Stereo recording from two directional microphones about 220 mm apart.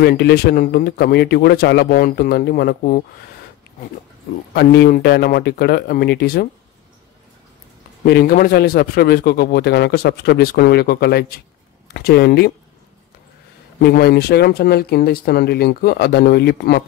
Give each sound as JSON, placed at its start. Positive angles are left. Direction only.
{"t": 0.0, "sound": "a man's voice", "side_deg": 45}
{"t": 4.6, "sound": "a man's voice", "side_deg": 45}
{"t": 8.0, "sound": "a man's voice", "side_deg": 45}
{"t": 13.7, "sound": "a man's voice", "side_deg": 45}